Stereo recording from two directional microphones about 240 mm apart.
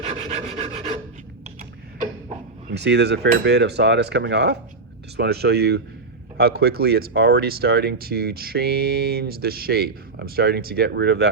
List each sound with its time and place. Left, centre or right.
0.0 s rub: right
2.6 s cutlery: right
6.3 s speech: right